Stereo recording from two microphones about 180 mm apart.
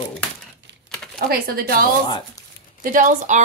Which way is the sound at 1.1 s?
55° right (ahead or behind).